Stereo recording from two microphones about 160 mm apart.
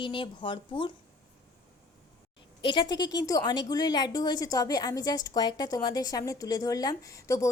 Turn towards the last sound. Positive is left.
turn(degrees=20)  # may be behind; listen again after turning